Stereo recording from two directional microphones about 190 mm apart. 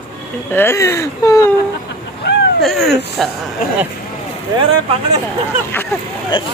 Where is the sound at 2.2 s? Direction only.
60° left (ahead or behind).